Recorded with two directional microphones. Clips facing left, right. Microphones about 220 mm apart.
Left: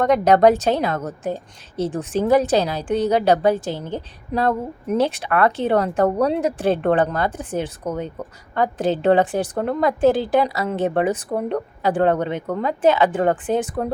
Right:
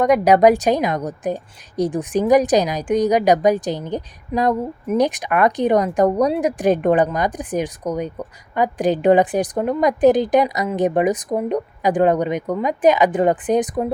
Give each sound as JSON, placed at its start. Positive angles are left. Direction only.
{"t": 0.0, "sound": "a woman's voice", "side_deg": -10}
{"t": 4.3, "sound": "a sound", "side_deg": 0}
{"t": 4.9, "sound": "a woman's voice", "side_deg": -15}